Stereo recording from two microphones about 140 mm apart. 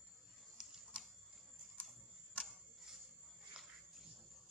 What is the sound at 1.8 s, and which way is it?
Camera, 10° left (ahead or behind).